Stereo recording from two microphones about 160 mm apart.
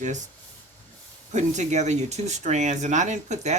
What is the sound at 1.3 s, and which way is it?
Speech, 45° right (ahead or behind).